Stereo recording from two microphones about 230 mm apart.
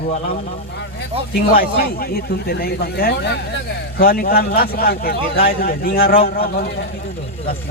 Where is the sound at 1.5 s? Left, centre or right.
Left.